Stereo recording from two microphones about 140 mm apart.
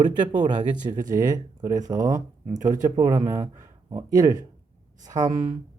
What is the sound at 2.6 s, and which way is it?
Speech, 65° right (ahead or behind).